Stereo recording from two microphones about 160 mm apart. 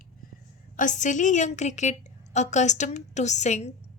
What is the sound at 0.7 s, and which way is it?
A woman's voice, 50° left (ahead or behind).